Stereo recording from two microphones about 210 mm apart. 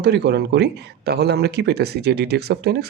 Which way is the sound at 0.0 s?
50° right (ahead or behind).